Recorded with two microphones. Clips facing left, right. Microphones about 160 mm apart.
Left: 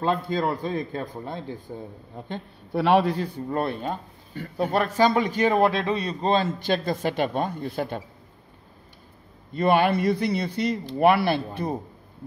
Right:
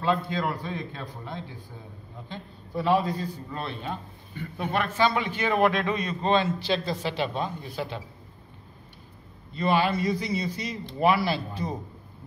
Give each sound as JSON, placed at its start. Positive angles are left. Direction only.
{"t": 0.0, "sound": "a man's voice", "side_deg": 40}
{"t": 2.2, "sound": "a man's voice", "side_deg": 65}
{"t": 9.5, "sound": "speech", "side_deg": 55}